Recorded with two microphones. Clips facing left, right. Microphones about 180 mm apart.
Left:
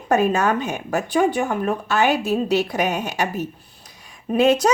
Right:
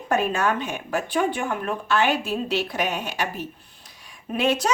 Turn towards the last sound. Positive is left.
turn(degrees=40)  # may be behind; listen again after turning